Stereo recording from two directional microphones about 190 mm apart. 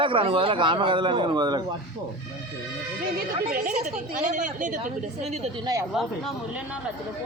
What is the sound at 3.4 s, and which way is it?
A woman's voice, 50° right (ahead or behind).